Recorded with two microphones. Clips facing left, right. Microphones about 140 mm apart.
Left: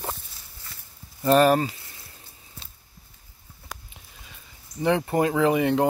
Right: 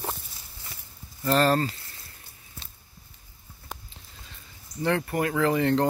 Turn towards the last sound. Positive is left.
turn(degrees=10)  # may be behind; listen again after turning